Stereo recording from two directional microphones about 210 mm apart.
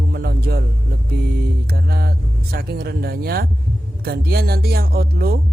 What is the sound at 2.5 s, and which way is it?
Speech, 45° right (ahead or behind).